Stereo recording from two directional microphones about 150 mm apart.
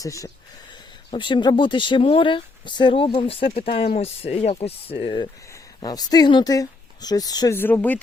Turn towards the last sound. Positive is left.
turn(degrees=10)  # may be behind; listen again after turning